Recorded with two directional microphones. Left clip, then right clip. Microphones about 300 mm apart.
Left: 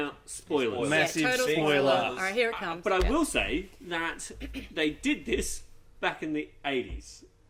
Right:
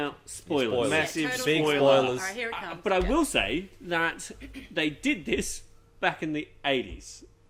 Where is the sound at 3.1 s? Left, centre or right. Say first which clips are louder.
Right 2 dB; centre.